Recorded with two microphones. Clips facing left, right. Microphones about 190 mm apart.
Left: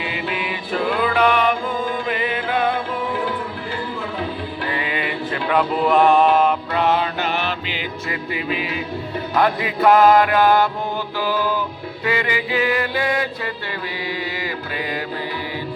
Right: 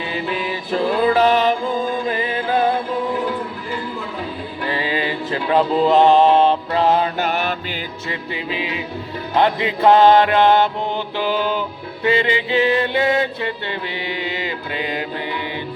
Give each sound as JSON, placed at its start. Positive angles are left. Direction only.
{"t": 0.1, "sound": "music", "side_deg": -35}
{"t": 4.7, "sound": "a sound", "side_deg": -30}
{"t": 8.3, "sound": "music", "side_deg": -25}
{"t": 14.3, "sound": "mantra", "side_deg": -20}